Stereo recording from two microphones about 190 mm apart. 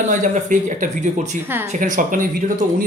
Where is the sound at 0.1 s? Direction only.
40° right (ahead or behind).